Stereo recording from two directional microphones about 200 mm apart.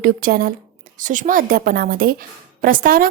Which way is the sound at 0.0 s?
45° right (ahead or behind).